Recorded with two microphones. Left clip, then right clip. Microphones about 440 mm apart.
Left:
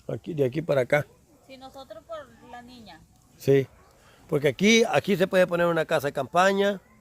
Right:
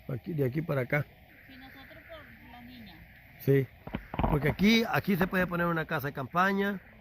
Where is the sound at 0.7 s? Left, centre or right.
Centre.